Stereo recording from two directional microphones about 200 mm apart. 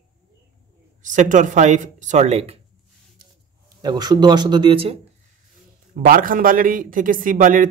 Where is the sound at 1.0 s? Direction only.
40° right (ahead or behind).